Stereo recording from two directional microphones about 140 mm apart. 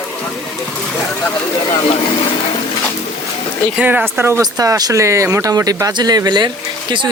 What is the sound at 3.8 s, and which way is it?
Speech, 10° right (ahead or behind).